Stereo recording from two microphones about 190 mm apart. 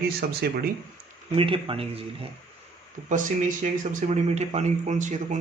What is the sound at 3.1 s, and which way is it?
Speech, 45° right (ahead or behind).